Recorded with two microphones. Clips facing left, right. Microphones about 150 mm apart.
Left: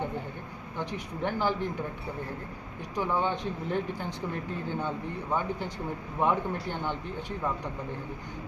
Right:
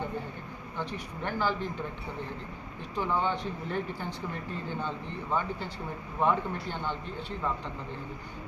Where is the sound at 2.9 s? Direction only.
15° left (ahead or behind).